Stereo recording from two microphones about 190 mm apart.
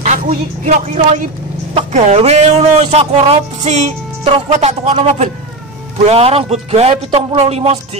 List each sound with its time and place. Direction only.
0.0 s a man's voice: 35° right (ahead or behind)